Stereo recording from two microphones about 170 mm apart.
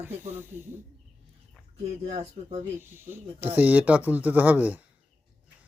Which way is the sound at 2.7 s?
15° right (ahead or behind).